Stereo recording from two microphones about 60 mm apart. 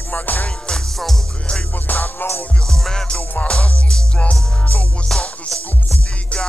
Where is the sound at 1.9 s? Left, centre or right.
Left.